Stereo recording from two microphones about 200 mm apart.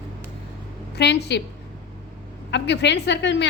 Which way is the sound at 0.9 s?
55° left (ahead or behind).